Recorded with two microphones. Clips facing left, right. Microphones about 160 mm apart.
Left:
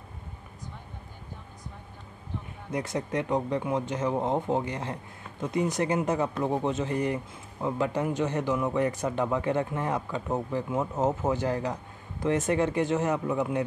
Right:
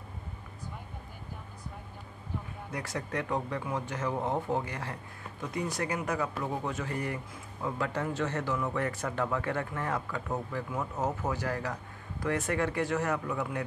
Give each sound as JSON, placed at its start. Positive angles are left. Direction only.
{"t": 2.7, "sound": "speech", "side_deg": 20}